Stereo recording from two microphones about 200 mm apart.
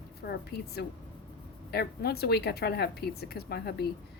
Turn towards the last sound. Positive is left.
turn(degrees=55)  # may be behind; listen again after turning